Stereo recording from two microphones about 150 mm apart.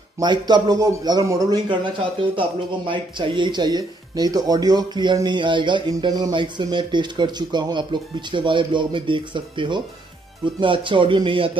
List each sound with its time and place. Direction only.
0.2 s a man's voice: 30° right (ahead or behind)
2.9 s speech: 30° right (ahead or behind)